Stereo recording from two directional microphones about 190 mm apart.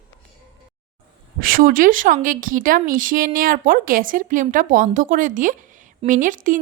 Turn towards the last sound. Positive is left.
turn(degrees=-45)  # may be behind; listen again after turning